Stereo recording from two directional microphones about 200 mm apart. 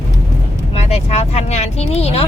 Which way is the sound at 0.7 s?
30° left (ahead or behind).